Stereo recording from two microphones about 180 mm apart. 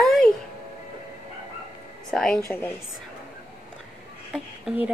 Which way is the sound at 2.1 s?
Centre (ahead or behind).